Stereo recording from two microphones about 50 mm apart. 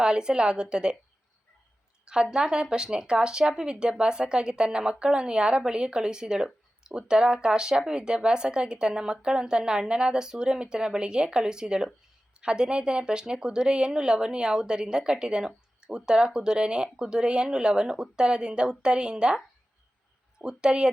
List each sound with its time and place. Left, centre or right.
0.0 s a woman's voice: centre
2.0 s a woman's voice: centre
20.4 s a woman's voice: centre